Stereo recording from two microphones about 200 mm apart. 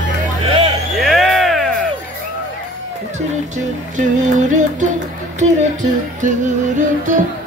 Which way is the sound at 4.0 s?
40° right (ahead or behind).